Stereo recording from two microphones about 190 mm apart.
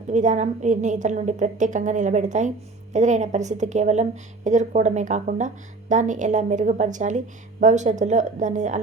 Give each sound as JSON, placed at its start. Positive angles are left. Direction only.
{"t": 0.1, "sound": "a woman's voice", "side_deg": -40}